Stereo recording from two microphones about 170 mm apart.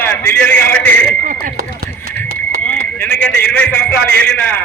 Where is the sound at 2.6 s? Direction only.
10° left (ahead or behind).